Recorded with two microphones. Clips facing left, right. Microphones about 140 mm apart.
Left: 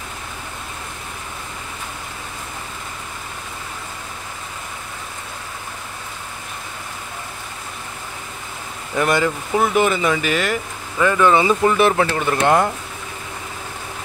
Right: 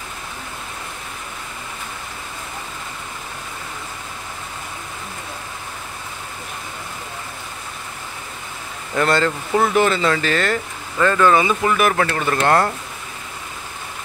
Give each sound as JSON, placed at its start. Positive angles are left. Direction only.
{"t": 8.9, "sound": "speech", "side_deg": 15}
{"t": 11.4, "sound": "speech", "side_deg": 30}
{"t": 11.9, "sound": "speech", "side_deg": 15}